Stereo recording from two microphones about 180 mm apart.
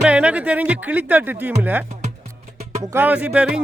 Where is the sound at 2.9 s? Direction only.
10° right (ahead or behind).